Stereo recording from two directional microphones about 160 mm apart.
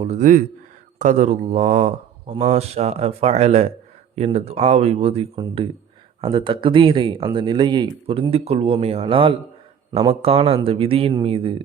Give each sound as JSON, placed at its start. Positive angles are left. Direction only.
{"t": 0.0, "sound": "speech", "side_deg": -45}